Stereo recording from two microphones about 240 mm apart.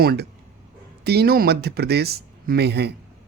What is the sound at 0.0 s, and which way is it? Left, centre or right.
Speech, right.